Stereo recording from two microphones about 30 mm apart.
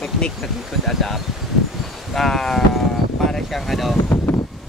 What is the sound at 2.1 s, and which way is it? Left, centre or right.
Speech, centre.